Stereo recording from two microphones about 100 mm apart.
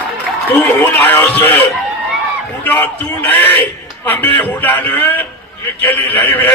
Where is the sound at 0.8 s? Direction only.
25° left (ahead or behind).